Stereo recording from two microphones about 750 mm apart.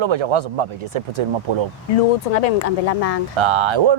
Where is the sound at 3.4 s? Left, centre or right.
Right.